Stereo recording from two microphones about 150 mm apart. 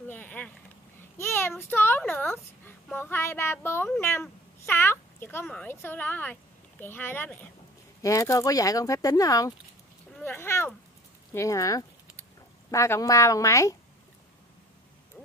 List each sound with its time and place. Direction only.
0.1 s boat: 10° left (ahead or behind)
1.1 s a child's voice: 15° left (ahead or behind)